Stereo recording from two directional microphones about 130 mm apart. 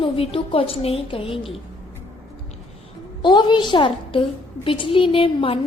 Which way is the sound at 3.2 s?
40° left (ahead or behind).